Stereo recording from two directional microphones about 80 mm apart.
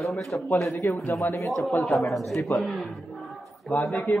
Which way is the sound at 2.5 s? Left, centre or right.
Left.